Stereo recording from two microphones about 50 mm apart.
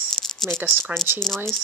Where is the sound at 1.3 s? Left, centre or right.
Centre.